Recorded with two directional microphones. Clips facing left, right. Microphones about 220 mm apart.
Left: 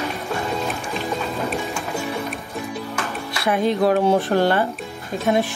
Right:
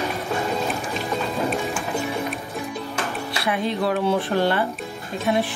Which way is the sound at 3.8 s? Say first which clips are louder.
Left 4 dB; 45° left (ahead or behind).